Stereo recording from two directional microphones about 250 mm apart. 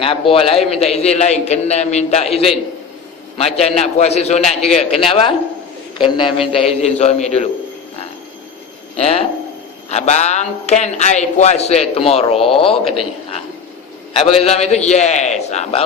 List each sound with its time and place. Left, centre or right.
0.0 s a man's voice: left
9.0 s a man's voice: left
14.1 s a man's voice: left